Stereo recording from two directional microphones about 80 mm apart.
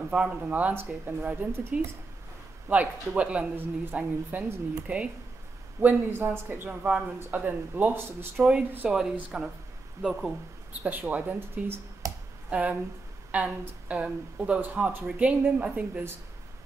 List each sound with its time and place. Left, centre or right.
0.1 s speech: centre
2.7 s speech: centre
8.8 s speech: centre
10.8 s speech: right
12.0 s a sound: right
12.4 s speech: centre